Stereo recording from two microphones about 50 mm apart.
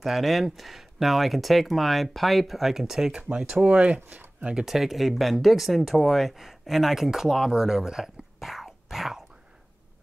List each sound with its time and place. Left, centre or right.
0.0 s speech: centre
3.6 s speech: right
4.6 s speech: centre